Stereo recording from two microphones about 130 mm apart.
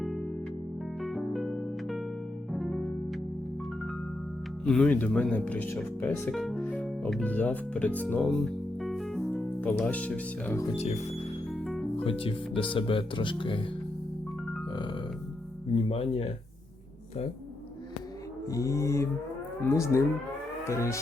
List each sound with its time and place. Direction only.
1.0 s music: centre (ahead or behind)
4.6 s speech: 5° left (ahead or behind)
6.3 s speech: centre (ahead or behind)
6.6 s music: 10° left (ahead or behind)
7.1 s speech: 10° left (ahead or behind)
8.8 s music: centre (ahead or behind)
9.6 s speech: 10° left (ahead or behind)
10.8 s speech: 55° left (ahead or behind)
11.5 s music: centre (ahead or behind)
12.0 s speech: 45° left (ahead or behind)
14.7 s burping: 40° left (ahead or behind)
15.7 s music: 50° left (ahead or behind)
18.4 s music: 25° left (ahead or behind)